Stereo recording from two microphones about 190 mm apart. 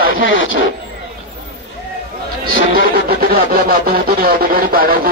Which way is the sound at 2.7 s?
50° right (ahead or behind).